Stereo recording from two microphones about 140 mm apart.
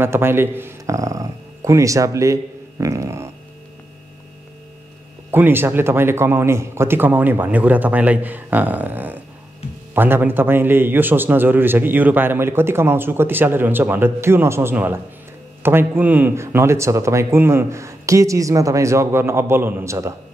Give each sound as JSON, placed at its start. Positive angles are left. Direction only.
{"t": 0.0, "sound": "a man's voice", "side_deg": -15}
{"t": 5.3, "sound": "a man's voice", "side_deg": -15}